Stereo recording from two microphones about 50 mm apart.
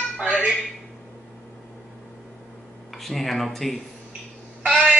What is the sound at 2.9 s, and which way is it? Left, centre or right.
Speech, centre.